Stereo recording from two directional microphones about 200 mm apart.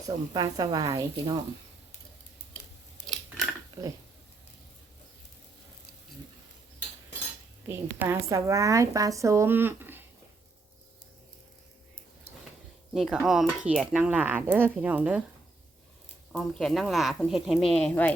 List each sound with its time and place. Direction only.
0.3 s a woman's voice: 20° right (ahead or behind)
3.8 s speech: 15° right (ahead or behind)
7.9 s speech: 10° right (ahead or behind)
12.9 s speech: centre (ahead or behind)
16.3 s speech: centre (ahead or behind)